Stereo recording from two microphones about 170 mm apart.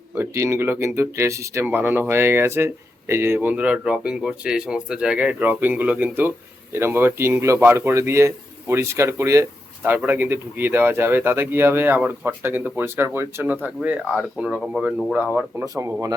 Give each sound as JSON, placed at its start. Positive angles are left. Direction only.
{"t": 0.1, "sound": "a man's voice", "side_deg": -15}